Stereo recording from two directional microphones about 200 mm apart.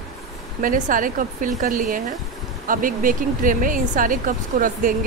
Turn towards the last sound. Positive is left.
turn(degrees=-40)  # may be behind; listen again after turning